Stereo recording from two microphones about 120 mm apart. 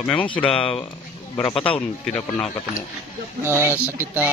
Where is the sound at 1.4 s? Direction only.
50° left (ahead or behind).